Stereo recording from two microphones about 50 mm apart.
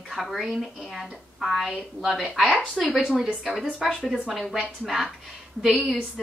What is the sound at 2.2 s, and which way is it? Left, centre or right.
A woman's voice, centre.